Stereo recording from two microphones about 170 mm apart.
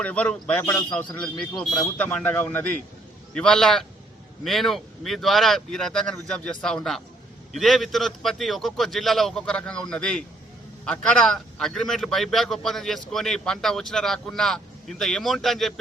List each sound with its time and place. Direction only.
0.0 s a man's voice: 5° left (ahead or behind)